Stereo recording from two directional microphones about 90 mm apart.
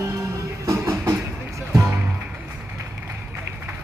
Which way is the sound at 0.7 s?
35° right (ahead or behind).